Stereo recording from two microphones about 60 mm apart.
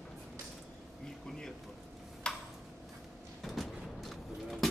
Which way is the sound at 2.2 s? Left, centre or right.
Centre.